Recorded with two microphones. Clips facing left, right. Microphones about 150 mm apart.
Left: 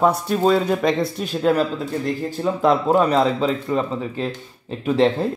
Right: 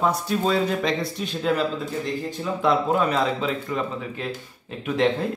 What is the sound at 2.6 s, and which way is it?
Speech, 35° left (ahead or behind).